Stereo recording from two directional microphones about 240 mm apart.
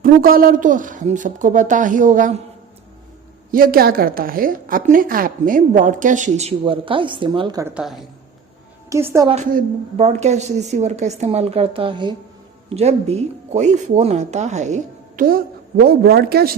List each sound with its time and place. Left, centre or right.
0.0 s a woman's voice: right
3.5 s a woman's voice: right; by 9.3 s centre
9.3 s a woman's voice: right